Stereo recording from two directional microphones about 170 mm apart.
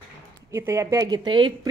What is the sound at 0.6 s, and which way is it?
Speech, 15° right (ahead or behind).